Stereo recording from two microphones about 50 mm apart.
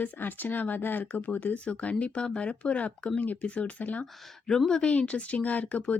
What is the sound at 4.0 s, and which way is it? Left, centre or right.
Speech, centre.